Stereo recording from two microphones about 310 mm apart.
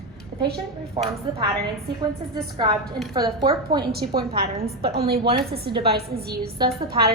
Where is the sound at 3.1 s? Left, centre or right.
Centre.